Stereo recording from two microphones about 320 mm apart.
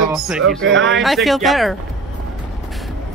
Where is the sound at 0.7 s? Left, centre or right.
Right.